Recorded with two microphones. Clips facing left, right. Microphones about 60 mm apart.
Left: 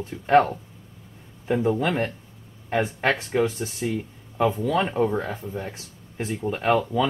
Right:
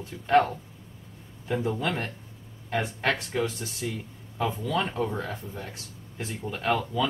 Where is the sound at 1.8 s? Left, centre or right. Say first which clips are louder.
Left 5 dB; left.